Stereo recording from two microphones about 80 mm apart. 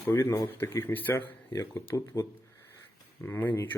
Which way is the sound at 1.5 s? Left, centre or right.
Left.